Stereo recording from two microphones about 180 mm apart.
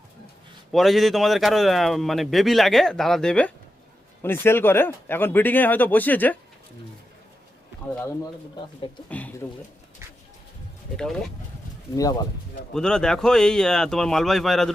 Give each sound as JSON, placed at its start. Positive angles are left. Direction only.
{"t": 0.7, "sound": "a man's voice", "side_deg": 0}
{"t": 7.9, "sound": "speech", "side_deg": 15}
{"t": 10.9, "sound": "a man's voice", "side_deg": 5}
{"t": 12.7, "sound": "a man's voice", "side_deg": 5}